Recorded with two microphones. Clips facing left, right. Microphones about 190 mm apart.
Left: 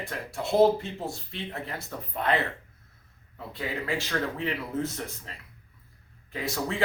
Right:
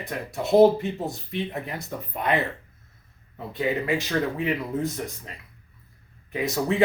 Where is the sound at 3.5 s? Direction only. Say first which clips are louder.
Right 7 dB; 20° right (ahead or behind).